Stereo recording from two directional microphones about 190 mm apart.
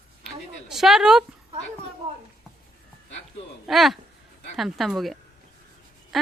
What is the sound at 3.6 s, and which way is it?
Speech, centre (ahead or behind).